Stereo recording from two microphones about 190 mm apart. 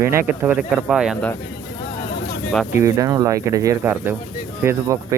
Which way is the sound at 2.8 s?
20° right (ahead or behind).